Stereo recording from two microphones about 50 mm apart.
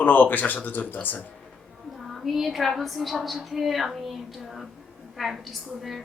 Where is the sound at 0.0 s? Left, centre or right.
Left.